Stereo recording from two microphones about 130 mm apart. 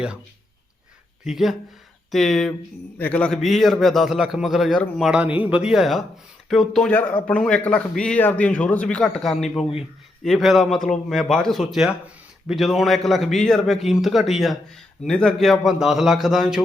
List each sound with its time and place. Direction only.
1.2 s a man's voice: 5° right (ahead or behind)
5.2 s a man's voice: 10° right (ahead or behind)